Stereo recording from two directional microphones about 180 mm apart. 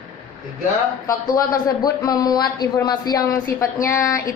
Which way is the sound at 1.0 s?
20° left (ahead or behind).